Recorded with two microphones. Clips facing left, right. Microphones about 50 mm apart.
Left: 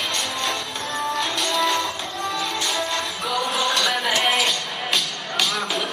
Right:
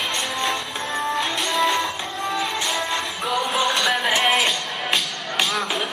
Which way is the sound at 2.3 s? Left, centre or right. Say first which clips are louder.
Right 1 dB; centre.